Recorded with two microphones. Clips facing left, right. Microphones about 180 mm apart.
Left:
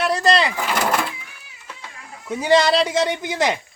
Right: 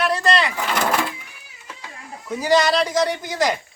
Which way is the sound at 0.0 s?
30° left (ahead or behind).